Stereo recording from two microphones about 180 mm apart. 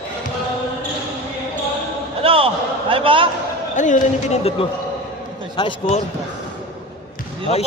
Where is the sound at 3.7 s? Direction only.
45° left (ahead or behind).